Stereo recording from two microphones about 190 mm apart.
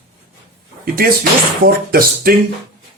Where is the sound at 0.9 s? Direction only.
50° right (ahead or behind).